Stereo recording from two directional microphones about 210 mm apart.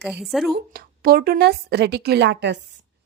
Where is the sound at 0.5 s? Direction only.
45° right (ahead or behind).